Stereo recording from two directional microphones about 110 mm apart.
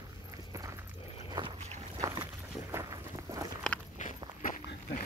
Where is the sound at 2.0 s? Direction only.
40° right (ahead or behind).